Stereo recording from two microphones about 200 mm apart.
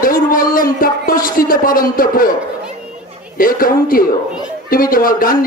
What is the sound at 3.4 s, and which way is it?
Speech, 45° left (ahead or behind).